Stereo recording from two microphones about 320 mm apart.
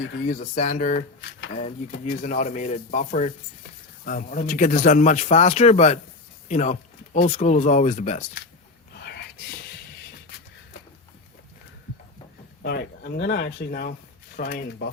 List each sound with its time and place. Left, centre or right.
0.0 s speech: left
12.6 s speech: left